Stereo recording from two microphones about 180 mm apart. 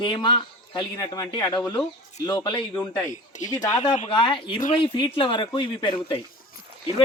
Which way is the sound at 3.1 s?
45° left (ahead or behind).